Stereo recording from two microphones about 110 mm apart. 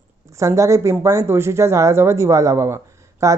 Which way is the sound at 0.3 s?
25° right (ahead or behind).